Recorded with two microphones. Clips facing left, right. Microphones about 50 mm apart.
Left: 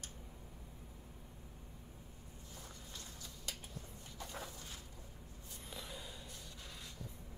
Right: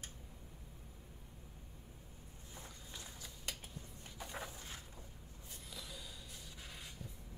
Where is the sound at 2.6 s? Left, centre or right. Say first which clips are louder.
Right 1 dB; centre.